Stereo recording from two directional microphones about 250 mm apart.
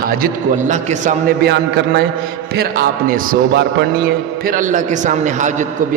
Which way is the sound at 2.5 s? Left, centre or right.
Right.